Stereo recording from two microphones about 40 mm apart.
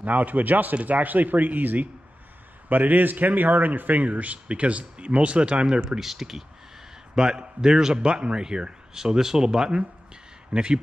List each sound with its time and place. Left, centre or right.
0.0 s a man's voice: right
5.9 s a man's voice: centre